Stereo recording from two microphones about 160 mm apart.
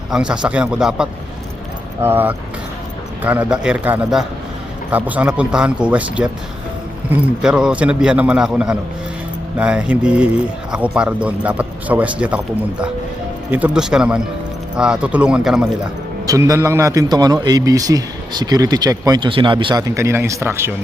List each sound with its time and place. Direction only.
0.1 s a man's voice: 5° right (ahead or behind)
13.5 s a man's voice: 10° right (ahead or behind)
16.2 s speech: 20° right (ahead or behind)